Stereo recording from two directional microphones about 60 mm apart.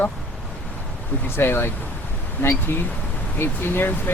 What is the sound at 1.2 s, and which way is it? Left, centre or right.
Speech, left.